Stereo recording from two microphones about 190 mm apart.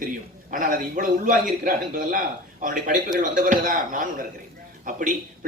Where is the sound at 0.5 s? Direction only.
45° right (ahead or behind).